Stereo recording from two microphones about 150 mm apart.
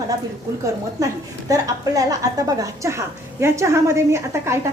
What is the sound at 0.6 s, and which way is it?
A woman's voice, 20° right (ahead or behind).